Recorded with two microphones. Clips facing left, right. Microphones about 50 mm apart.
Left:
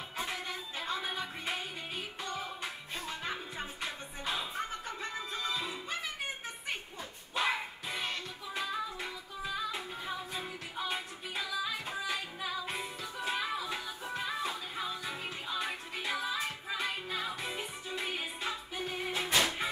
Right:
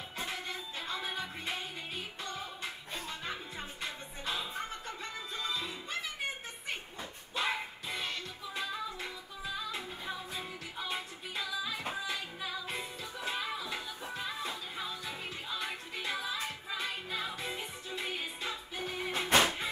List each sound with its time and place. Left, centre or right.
0.2 s music: centre
7.3 s music: centre
19.2 s music: right